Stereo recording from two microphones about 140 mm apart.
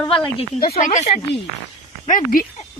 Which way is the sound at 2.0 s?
75° left (ahead or behind).